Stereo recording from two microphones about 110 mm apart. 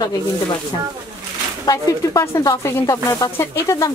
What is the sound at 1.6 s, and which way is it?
Speech, 30° left (ahead or behind).